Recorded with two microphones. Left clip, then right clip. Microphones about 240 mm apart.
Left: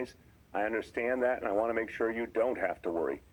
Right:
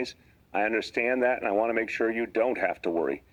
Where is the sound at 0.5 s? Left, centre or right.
Right.